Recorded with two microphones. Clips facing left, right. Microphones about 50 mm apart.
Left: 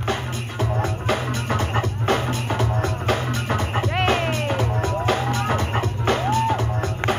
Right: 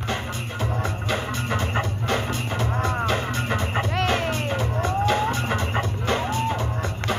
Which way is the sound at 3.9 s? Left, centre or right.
Left.